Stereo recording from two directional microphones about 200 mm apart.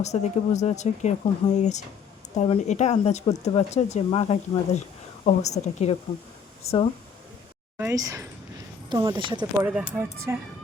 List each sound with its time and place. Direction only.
0.0 s speech: 35° left (ahead or behind)
7.8 s speech: 15° right (ahead or behind)
9.6 s speech: 10° right (ahead or behind)